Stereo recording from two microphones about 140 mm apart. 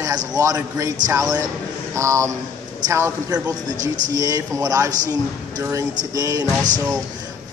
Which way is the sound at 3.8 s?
65° right (ahead or behind).